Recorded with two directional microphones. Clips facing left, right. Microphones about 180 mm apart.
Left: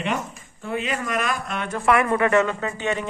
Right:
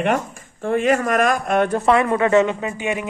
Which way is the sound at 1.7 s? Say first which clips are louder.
Right 3 dB; 25° right (ahead or behind).